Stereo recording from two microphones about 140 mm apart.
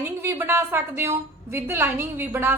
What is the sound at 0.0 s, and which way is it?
A woman's voice, 15° right (ahead or behind).